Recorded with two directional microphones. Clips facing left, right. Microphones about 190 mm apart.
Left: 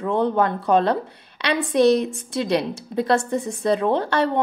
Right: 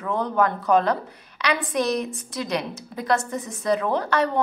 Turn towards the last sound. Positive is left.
turn(degrees=30)  # may be behind; listen again after turning